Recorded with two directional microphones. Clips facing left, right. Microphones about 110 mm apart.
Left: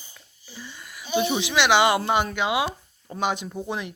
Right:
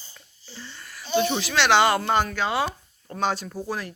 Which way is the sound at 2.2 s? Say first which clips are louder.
Left 1 dB; 15° left (ahead or behind).